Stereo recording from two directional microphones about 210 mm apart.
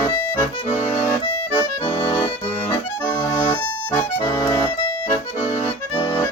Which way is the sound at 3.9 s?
15° left (ahead or behind).